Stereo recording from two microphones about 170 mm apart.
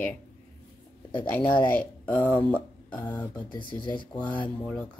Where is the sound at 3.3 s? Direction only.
25° left (ahead or behind).